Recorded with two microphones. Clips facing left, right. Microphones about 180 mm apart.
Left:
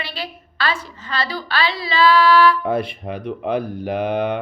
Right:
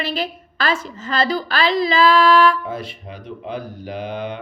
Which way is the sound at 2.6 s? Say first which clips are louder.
Left 7 dB; 60° left (ahead or behind).